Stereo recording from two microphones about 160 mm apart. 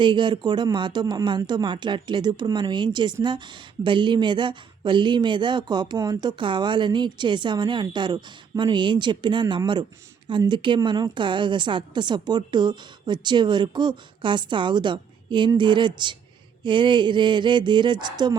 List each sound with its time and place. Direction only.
0.0 s speech: 30° right (ahead or behind)